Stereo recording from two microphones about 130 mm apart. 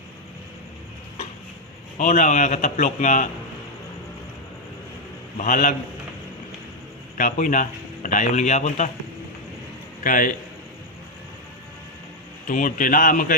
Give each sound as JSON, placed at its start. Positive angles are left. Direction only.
{"t": 2.0, "sound": "a man's voice", "side_deg": 75}
{"t": 5.4, "sound": "a man's voice", "side_deg": 80}
{"t": 7.2, "sound": "a man's voice", "side_deg": 90}
{"t": 10.0, "sound": "speech", "side_deg": 90}
{"t": 12.5, "sound": "speech", "side_deg": 90}